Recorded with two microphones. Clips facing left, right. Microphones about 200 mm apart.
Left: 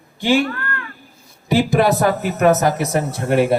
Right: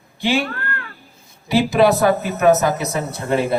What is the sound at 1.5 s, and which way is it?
Speech, 50° left (ahead or behind).